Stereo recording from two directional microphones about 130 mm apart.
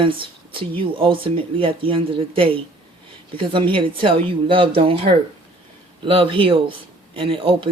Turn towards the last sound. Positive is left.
turn(degrees=-40)  # may be behind; listen again after turning